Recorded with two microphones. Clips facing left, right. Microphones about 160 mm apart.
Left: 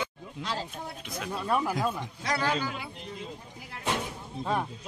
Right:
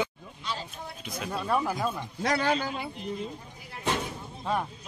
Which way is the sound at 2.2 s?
55° right (ahead or behind).